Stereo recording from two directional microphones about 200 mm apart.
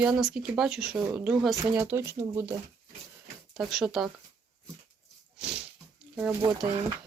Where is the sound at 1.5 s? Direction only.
15° right (ahead or behind).